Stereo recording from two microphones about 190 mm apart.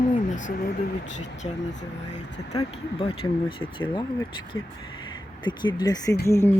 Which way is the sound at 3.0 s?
30° left (ahead or behind).